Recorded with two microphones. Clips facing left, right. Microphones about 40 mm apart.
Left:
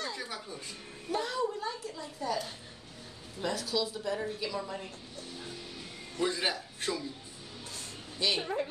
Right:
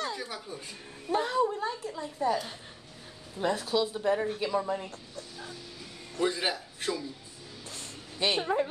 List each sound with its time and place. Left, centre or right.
0.1 s speech: centre
1.1 s a woman's voice: right
3.3 s a woman's voice: right
6.2 s a man's voice: centre
7.7 s music: right
8.4 s a woman's voice: centre